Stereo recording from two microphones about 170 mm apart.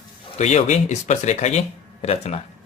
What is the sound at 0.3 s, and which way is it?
Speech, 45° left (ahead or behind).